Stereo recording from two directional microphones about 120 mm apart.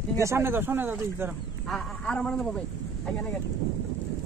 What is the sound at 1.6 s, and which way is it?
A man's voice, 5° left (ahead or behind).